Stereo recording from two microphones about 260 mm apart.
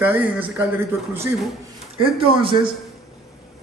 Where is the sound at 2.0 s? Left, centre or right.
Centre.